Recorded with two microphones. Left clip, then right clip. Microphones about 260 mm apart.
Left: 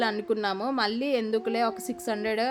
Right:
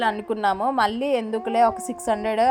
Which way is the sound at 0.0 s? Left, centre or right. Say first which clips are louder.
Right 5 dB; centre.